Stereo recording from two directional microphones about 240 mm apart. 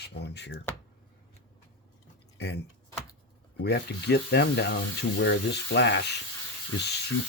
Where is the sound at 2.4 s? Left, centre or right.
Left.